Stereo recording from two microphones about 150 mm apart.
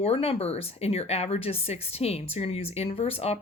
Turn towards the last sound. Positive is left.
turn(degrees=40)  # may be behind; listen again after turning